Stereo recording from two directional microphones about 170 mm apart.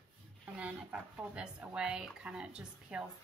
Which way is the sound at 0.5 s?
10° right (ahead or behind).